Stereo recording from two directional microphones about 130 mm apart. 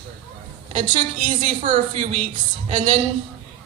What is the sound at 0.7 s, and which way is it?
Speech, 45° right (ahead or behind).